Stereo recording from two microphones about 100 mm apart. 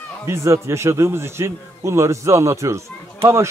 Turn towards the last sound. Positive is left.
turn(degrees=-30)  # may be behind; listen again after turning